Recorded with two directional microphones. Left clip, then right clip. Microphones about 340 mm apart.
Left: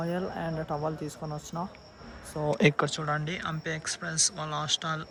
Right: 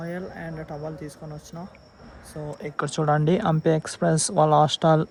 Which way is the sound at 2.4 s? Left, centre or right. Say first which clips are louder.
Left 11 dB; left.